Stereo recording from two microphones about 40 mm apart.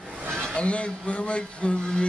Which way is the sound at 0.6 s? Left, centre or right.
Left.